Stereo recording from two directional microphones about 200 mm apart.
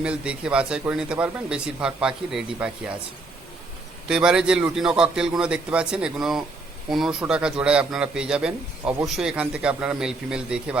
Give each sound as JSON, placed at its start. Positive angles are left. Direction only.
{"t": 0.0, "sound": "a man's voice", "side_deg": -5}
{"t": 4.1, "sound": "a man's voice", "side_deg": -5}